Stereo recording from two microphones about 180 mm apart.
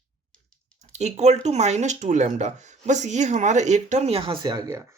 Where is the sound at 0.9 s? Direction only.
40° right (ahead or behind); by 4.7 s 20° right (ahead or behind).